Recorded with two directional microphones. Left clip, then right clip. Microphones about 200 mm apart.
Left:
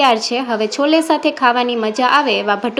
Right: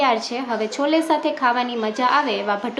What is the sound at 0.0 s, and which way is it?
A woman's voice, 30° left (ahead or behind).